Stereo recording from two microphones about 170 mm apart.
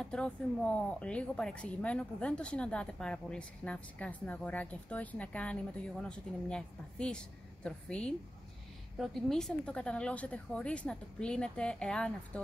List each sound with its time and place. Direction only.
0.0 s a woman's voice: 5° left (ahead or behind)